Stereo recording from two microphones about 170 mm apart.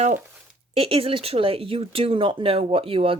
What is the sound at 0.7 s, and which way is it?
Speech, 30° right (ahead or behind).